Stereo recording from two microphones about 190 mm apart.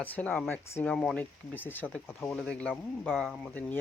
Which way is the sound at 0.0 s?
10° left (ahead or behind).